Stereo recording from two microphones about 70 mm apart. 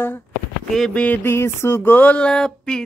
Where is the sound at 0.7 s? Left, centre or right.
Centre.